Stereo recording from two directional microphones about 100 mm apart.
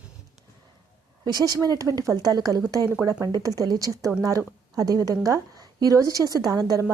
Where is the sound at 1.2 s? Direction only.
40° right (ahead or behind).